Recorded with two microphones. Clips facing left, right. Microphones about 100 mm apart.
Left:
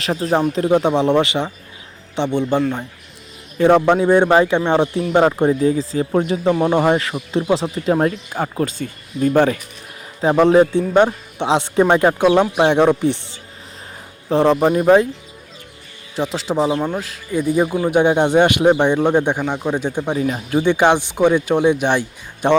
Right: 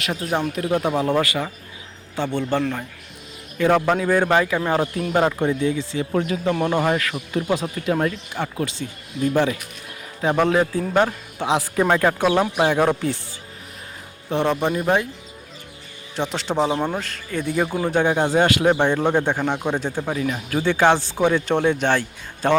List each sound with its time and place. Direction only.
0.0 s speech: 35° left (ahead or behind); by 2.6 s 15° left (ahead or behind)
3.6 s speech: 30° left (ahead or behind); by 9.6 s 50° left (ahead or behind)
10.2 s speech: 30° left (ahead or behind)
14.3 s speech: 35° left (ahead or behind)
16.1 s speech: centre (ahead or behind)
18.0 s speech: 20° left (ahead or behind)
20.1 s speech: 30° left (ahead or behind)
20.6 s speech: 15° left (ahead or behind)